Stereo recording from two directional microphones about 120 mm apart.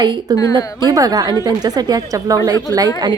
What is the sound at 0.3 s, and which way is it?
Speech, 35° right (ahead or behind).